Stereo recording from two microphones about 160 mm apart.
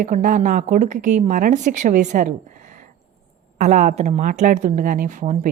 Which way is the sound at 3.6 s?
50° right (ahead or behind).